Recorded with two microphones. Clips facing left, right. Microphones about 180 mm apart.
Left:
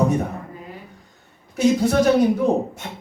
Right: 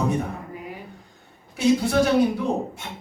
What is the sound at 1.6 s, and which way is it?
Speech, 40° left (ahead or behind).